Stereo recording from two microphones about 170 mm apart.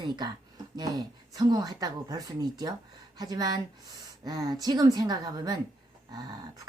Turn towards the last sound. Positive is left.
turn(degrees=-25)  # may be behind; listen again after turning